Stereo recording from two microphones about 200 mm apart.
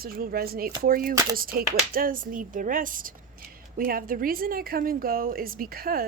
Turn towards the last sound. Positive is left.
turn(degrees=-50)  # may be behind; listen again after turning